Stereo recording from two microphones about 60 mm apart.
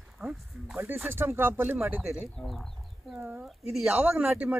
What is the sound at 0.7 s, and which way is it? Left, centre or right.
Speech, right.